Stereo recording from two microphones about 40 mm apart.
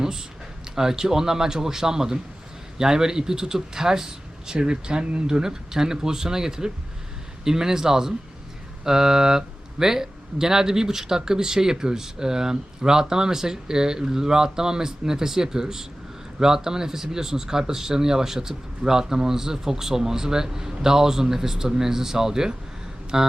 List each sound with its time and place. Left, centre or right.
0.0 s speech: centre